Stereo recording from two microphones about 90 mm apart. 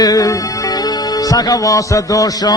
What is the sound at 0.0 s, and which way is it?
Music, 45° left (ahead or behind).